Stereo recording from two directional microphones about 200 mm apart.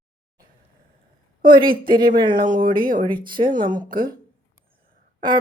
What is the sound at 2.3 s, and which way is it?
Speech, 45° right (ahead or behind).